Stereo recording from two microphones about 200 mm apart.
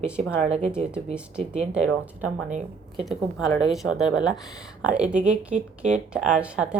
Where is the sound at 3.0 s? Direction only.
Centre (ahead or behind).